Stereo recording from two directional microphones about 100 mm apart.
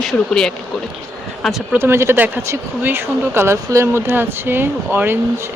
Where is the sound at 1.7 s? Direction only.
25° right (ahead or behind).